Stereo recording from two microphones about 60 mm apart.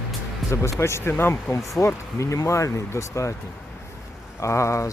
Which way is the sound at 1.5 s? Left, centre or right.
Left.